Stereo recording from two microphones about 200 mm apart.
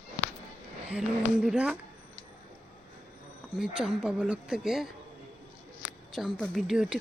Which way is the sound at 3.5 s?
5° right (ahead or behind).